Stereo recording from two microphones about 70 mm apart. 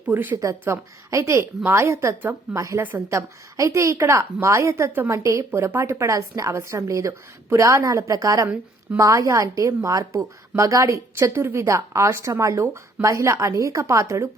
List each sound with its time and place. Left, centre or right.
0.1 s a woman's voice: right
0.6 s a woman's voice: right
5.5 s a woman's voice: right